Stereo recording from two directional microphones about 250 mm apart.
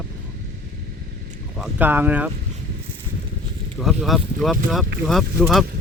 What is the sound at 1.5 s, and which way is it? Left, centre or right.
Speech, centre.